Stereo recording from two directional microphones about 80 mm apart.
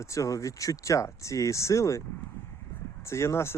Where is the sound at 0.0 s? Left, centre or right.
Left.